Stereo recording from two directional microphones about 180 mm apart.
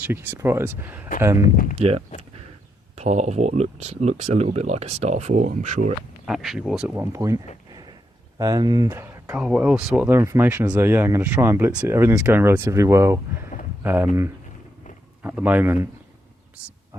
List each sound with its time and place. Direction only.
0.0 s speech: 10° right (ahead or behind)
1.4 s speech: 50° left (ahead or behind)
1.8 s speech: 30° right (ahead or behind)
6.2 s speech: centre (ahead or behind); by 7.4 s 20° right (ahead or behind)
7.7 s a sound: 25° right (ahead or behind)
8.4 s speech: 20° right (ahead or behind)
15.2 s speech: 10° right (ahead or behind)